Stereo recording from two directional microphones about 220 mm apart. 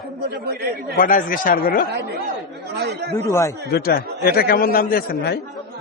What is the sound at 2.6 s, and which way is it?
Chatter, 45° right (ahead or behind).